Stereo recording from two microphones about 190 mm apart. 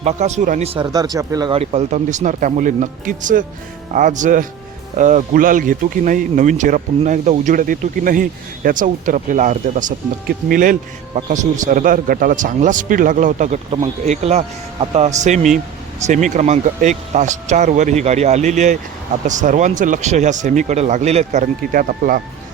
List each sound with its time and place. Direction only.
0.0 s speech: 35° right (ahead or behind)
0.9 s speech: 20° right (ahead or behind); by 22.2 s 50° right (ahead or behind)